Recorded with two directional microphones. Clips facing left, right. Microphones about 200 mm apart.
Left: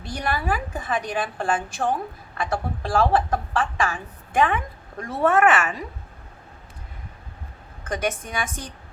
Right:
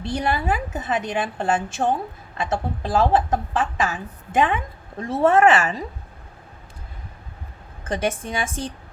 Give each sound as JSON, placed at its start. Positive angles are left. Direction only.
{"t": 0.0, "sound": "a woman's voice", "side_deg": -25}
{"t": 7.9, "sound": "a woman's voice", "side_deg": -30}